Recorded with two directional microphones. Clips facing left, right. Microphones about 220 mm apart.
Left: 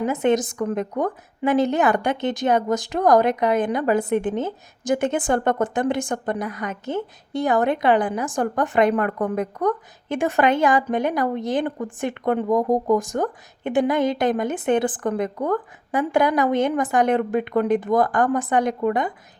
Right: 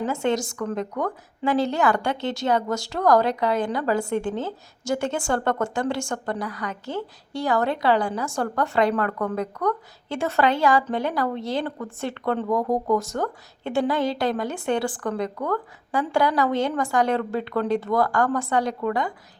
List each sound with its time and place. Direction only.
0.0 s a woman's voice: 20° left (ahead or behind)